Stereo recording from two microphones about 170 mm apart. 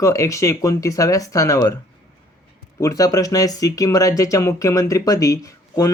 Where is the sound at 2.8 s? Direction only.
20° left (ahead or behind).